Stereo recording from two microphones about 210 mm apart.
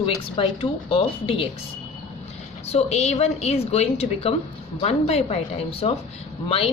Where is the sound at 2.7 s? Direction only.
30° left (ahead or behind).